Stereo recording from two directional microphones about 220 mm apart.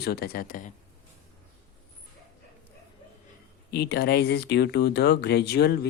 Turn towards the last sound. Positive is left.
turn(degrees=50)  # may be behind; listen again after turning